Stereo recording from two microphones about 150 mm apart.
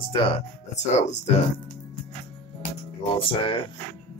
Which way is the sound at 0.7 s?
45° left (ahead or behind).